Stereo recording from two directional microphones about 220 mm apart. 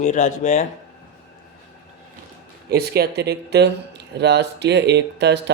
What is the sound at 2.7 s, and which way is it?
Speech, 45° right (ahead or behind).